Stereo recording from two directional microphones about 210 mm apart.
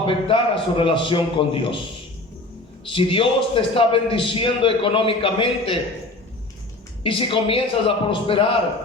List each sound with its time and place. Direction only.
0.0 s a man's voice: 25° left (ahead or behind)
2.9 s a man's voice: 25° left (ahead or behind)
7.0 s a man's voice: 25° left (ahead or behind)